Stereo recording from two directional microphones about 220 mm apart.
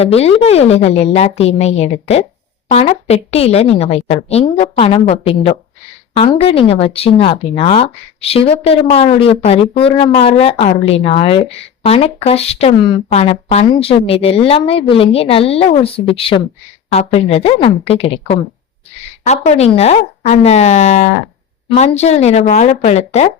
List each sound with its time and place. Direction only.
0.0 s speech: 30° left (ahead or behind)